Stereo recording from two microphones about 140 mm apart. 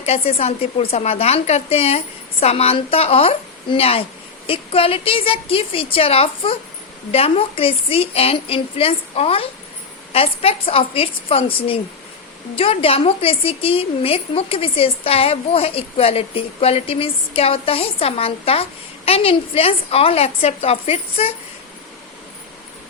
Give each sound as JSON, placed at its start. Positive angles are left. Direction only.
{"t": 0.0, "sound": "a woman's voice", "side_deg": 50}